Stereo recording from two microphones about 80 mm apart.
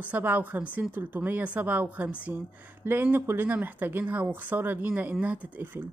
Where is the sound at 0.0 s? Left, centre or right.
Right.